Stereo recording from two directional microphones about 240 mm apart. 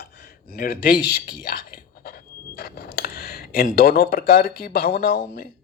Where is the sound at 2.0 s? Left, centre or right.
Left.